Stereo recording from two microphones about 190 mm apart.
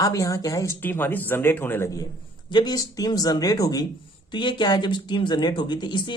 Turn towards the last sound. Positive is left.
turn(degrees=25)  # may be behind; listen again after turning